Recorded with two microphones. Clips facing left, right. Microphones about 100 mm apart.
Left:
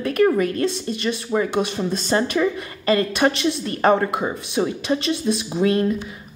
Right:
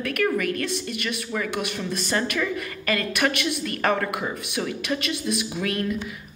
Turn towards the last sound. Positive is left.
turn(degrees=30)  # may be behind; listen again after turning